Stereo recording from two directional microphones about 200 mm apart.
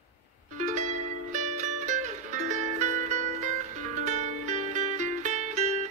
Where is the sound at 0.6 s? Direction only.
35° right (ahead or behind).